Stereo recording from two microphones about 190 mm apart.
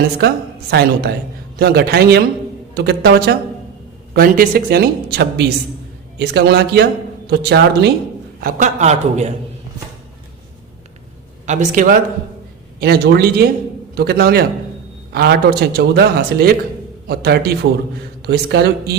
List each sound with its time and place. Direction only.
0.7 s a woman's voice: 55° right (ahead or behind)
8.4 s a man's voice: 45° right (ahead or behind)
11.4 s a man's voice: 40° right (ahead or behind)
12.8 s a woman's voice: 55° right (ahead or behind)